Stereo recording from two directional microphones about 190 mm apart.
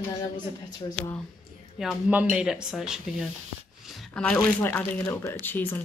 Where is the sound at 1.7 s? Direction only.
5° right (ahead or behind).